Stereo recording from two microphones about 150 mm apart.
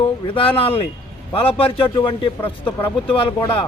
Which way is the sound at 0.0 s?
35° left (ahead or behind).